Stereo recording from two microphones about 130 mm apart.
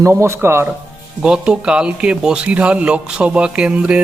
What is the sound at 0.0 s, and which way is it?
Speech, 20° right (ahead or behind).